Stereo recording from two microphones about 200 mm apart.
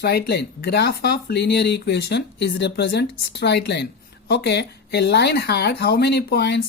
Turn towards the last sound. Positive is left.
turn(degrees=55)  # may be behind; listen again after turning